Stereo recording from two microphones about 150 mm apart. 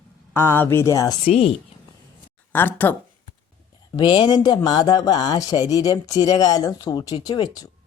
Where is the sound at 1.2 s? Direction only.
45° left (ahead or behind).